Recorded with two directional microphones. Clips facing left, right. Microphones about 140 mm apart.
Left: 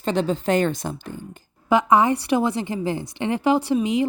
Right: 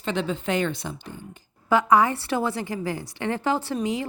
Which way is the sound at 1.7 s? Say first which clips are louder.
Left 2 dB; 20° left (ahead or behind).